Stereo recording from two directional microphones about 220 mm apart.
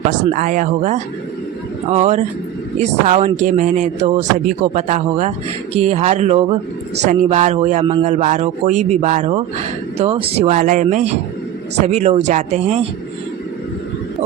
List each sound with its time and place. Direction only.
0.3 s speech: 35° right (ahead or behind)
7.9 s speech: 25° right (ahead or behind)
8.2 s speech: 35° right (ahead or behind)